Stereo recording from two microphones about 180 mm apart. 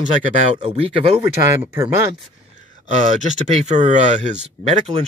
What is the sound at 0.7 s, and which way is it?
Speech, 35° right (ahead or behind).